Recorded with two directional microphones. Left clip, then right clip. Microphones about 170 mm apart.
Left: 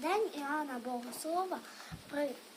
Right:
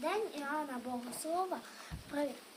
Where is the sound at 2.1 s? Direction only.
5° left (ahead or behind).